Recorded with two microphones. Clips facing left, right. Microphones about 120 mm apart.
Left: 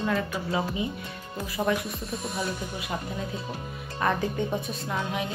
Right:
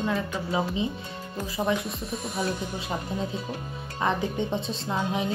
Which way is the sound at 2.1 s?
Centre (ahead or behind).